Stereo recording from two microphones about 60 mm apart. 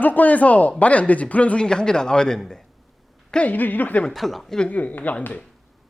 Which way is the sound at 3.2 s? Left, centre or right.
Centre.